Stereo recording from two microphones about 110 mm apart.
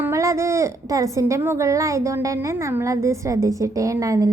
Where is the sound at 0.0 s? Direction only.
25° right (ahead or behind).